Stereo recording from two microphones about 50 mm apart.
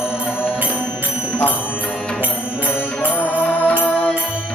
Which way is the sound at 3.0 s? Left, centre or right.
Left.